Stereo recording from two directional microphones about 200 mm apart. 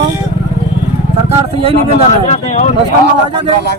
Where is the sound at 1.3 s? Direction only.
30° right (ahead or behind).